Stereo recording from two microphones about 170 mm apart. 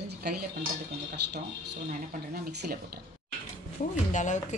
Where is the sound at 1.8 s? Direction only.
55° right (ahead or behind).